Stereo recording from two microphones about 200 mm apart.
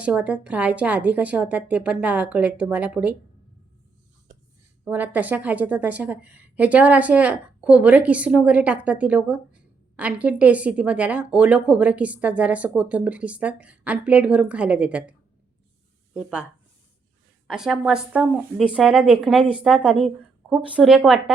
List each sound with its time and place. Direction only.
0.0 s a woman's voice: 5° right (ahead or behind)
4.9 s a woman's voice: 10° right (ahead or behind)
17.5 s speech: centre (ahead or behind)